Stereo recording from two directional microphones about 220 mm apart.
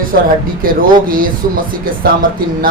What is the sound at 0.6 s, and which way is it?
Speech, 40° right (ahead or behind).